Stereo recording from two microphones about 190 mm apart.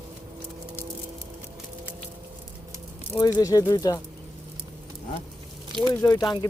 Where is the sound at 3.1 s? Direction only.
20° left (ahead or behind).